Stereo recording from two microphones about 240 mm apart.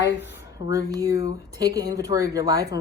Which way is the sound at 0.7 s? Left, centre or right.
Centre.